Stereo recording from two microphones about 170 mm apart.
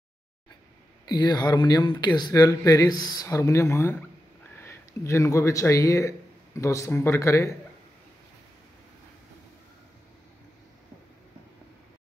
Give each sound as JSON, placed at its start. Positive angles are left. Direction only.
{"t": 1.0, "sound": "speech", "side_deg": 25}